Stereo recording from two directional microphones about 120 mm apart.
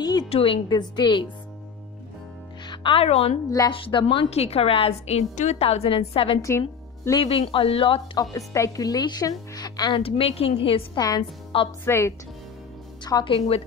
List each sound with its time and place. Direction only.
0.0 s music: 35° left (ahead or behind)
0.3 s speech: 55° left (ahead or behind)
0.7 s a woman's voice: 35° left (ahead or behind)
2.6 s speech: 40° left (ahead or behind)
3.4 s speech: 30° left (ahead or behind)
3.7 s speech: 45° left (ahead or behind)
4.3 s a woman's voice: 60° left (ahead or behind)
8.2 s speech: 25° left (ahead or behind)
9.5 s music: 35° left (ahead or behind)
10.0 s speech: 55° left (ahead or behind)
11.0 s a woman's voice: 30° left (ahead or behind)
13.0 s a woman's voice: 35° left (ahead or behind)